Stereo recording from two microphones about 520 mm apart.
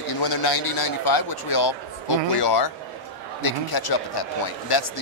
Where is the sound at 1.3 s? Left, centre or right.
Left.